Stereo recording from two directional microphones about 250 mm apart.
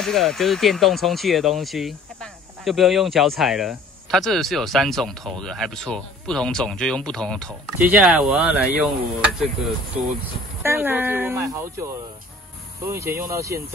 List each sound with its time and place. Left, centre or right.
0.0 s speech: centre
9.9 s speech: right
10.6 s speech: centre